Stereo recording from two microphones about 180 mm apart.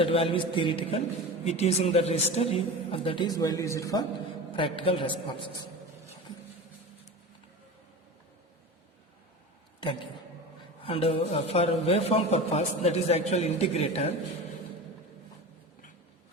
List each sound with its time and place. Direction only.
0.0 s a man's voice: 30° left (ahead or behind)
4.5 s a man's voice: 30° left (ahead or behind)
10.8 s a man's voice: 30° left (ahead or behind)